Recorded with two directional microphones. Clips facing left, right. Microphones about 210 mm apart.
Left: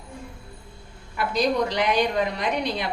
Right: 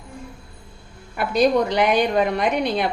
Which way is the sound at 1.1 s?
55° right (ahead or behind).